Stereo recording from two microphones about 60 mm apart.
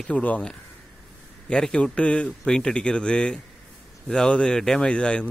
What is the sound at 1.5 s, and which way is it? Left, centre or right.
Speech, centre.